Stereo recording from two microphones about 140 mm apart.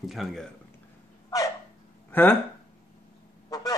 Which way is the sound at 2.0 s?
15° left (ahead or behind).